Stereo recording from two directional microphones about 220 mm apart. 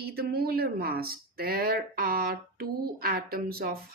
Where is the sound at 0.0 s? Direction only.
45° right (ahead or behind).